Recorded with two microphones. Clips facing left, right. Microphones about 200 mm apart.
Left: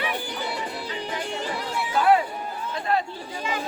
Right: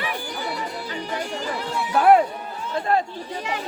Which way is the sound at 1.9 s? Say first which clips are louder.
Right 4 dB; 55° right (ahead or behind).